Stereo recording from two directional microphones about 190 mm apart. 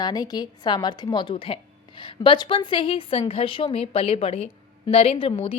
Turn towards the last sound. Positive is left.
turn(degrees=30)  # may be behind; listen again after turning